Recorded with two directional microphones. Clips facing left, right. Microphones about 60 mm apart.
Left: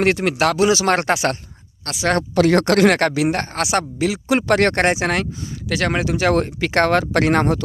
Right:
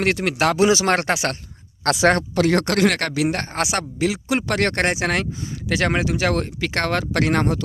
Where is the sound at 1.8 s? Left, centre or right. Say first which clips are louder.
Right 10 dB; right.